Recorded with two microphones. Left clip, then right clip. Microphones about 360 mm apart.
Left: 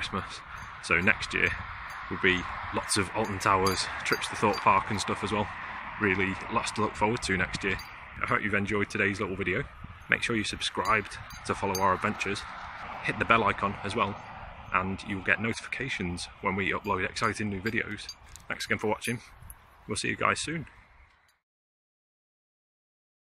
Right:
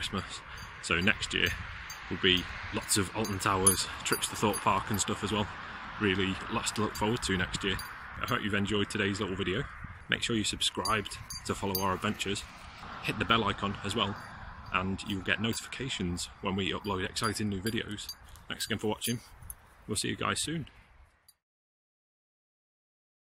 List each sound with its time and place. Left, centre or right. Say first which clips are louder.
0.0 s speech: left 3 dB; centre
2.3 s speech: left 1 dB; centre
2.9 s speech: left 2 dB; centre